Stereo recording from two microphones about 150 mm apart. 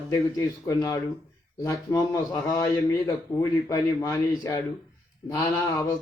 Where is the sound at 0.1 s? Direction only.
25° left (ahead or behind).